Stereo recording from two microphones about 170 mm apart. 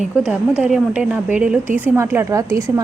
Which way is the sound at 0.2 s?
5° right (ahead or behind).